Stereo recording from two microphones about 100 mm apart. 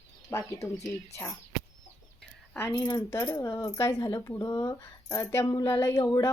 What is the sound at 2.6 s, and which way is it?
Speech, 25° left (ahead or behind).